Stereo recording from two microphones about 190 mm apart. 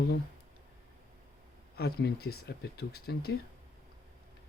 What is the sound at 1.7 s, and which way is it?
Speech, 55° left (ahead or behind).